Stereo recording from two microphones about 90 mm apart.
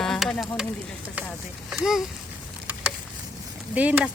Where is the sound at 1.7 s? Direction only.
5° right (ahead or behind).